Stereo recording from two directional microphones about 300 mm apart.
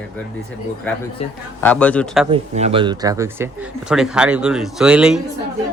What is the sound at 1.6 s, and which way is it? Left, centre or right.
Speech, centre.